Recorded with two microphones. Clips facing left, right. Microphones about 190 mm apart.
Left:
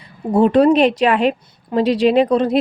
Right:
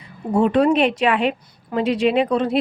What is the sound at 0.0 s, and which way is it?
A woman's voice, 35° left (ahead or behind).